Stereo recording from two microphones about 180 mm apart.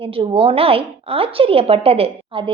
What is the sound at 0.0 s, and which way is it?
A woman's voice, 30° right (ahead or behind).